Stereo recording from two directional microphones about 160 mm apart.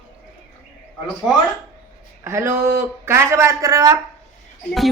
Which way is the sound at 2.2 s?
15° right (ahead or behind).